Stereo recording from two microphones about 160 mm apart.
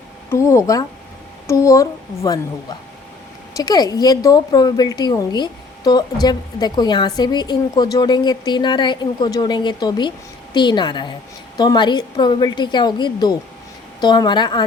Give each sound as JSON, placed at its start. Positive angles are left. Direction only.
{"t": 0.3, "sound": "a woman's voice", "side_deg": 20}